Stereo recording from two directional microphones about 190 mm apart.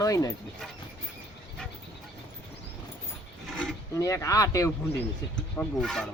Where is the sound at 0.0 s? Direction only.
20° left (ahead or behind).